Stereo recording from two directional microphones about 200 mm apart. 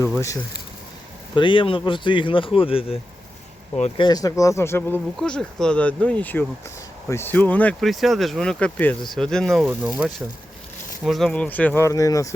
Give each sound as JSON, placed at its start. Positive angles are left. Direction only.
{"t": 1.4, "sound": "speech", "side_deg": 25}
{"t": 4.0, "sound": "speech", "side_deg": 20}